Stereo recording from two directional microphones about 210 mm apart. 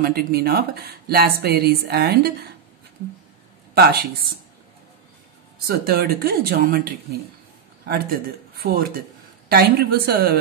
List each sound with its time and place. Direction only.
0.0 s speech: 50° right (ahead or behind)
3.7 s speech: 50° right (ahead or behind)
5.7 s speech: 45° right (ahead or behind)
8.5 s speech: 45° right (ahead or behind)